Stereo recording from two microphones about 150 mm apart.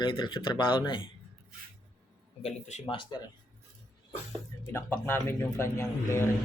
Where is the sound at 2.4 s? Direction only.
50° left (ahead or behind).